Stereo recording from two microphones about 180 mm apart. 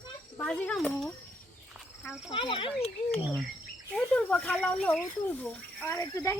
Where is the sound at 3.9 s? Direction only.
5° left (ahead or behind).